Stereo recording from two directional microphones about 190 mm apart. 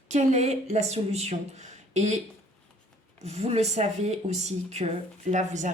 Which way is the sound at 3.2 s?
35° right (ahead or behind).